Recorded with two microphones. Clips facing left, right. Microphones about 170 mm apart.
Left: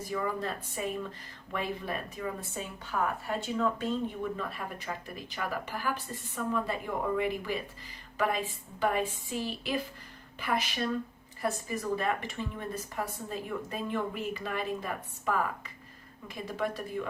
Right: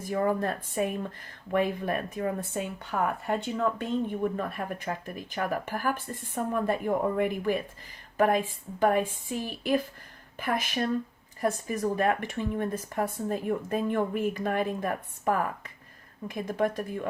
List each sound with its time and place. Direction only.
0.0 s speech: 50° right (ahead or behind)